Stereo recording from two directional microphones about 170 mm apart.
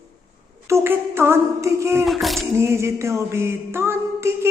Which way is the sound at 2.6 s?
15° right (ahead or behind).